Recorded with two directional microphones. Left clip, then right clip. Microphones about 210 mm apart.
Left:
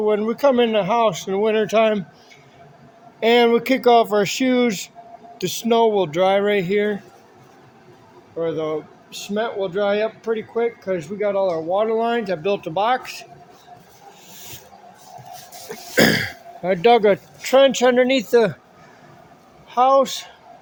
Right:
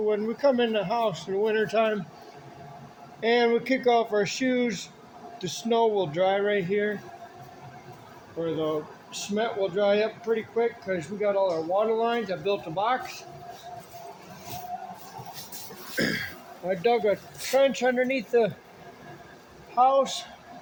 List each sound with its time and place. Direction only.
0.0 s speech: 40° left (ahead or behind)
3.2 s speech: 45° left (ahead or behind)
8.4 s speech: 50° left (ahead or behind)
16.0 s speech: 60° left (ahead or behind); by 18.5 s 35° left (ahead or behind)
19.7 s speech: 60° left (ahead or behind)